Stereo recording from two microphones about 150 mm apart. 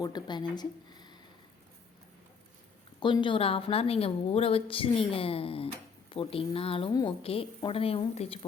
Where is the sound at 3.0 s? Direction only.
35° left (ahead or behind).